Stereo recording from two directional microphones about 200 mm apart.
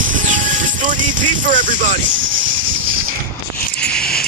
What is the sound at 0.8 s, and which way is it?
Vehicle, 40° right (ahead or behind).